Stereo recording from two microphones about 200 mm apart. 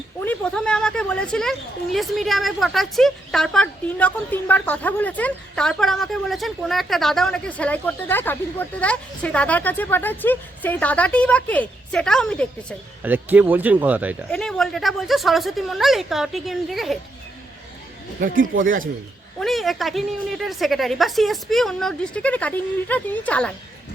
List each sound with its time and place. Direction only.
0.2 s speech: 5° left (ahead or behind)
13.0 s speech: 10° right (ahead or behind)
18.2 s speech: 45° right (ahead or behind)
19.4 s speech: centre (ahead or behind)